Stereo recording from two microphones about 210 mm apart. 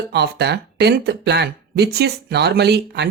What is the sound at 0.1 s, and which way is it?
Speech, 50° right (ahead or behind).